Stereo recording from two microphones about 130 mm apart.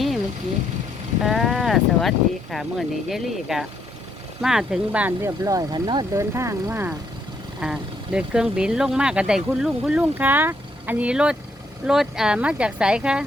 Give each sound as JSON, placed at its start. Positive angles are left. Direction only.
{"t": 1.2, "sound": "speech", "side_deg": 0}
{"t": 6.1, "sound": "speech", "side_deg": -20}
{"t": 7.6, "sound": "speech", "side_deg": -5}